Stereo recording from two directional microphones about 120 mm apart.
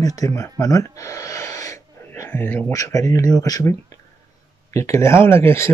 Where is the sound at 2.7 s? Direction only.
25° left (ahead or behind).